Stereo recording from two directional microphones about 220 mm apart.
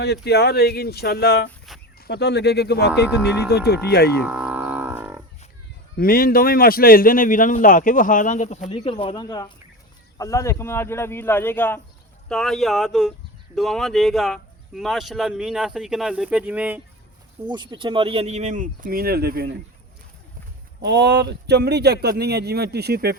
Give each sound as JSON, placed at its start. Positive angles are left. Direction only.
{"t": 0.0, "sound": "speech", "side_deg": 50}
{"t": 4.2, "sound": "livestock", "side_deg": -10}
{"t": 6.0, "sound": "a man's voice", "side_deg": 40}
{"t": 17.5, "sound": "speech", "side_deg": -20}
{"t": 20.8, "sound": "speech", "side_deg": -50}